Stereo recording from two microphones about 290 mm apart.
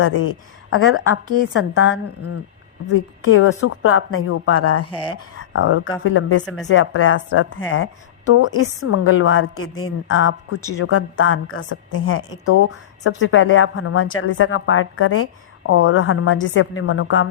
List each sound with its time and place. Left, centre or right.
0.0 s a woman's voice: left